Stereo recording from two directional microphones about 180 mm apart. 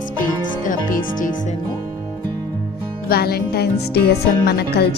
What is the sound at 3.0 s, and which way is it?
Speech, 60° left (ahead or behind).